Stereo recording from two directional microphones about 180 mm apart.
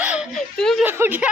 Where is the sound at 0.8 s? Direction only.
10° right (ahead or behind).